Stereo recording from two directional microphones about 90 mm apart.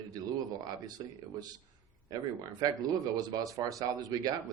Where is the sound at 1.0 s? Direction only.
55° right (ahead or behind).